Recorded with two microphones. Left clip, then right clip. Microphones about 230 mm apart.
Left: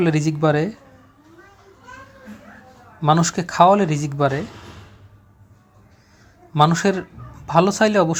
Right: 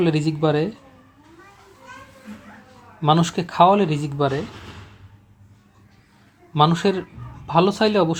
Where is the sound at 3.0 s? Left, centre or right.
Centre.